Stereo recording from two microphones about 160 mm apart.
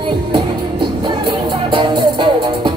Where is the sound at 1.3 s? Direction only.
30° right (ahead or behind).